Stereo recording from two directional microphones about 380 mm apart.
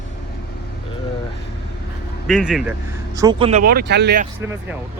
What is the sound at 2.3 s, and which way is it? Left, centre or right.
Speech, centre.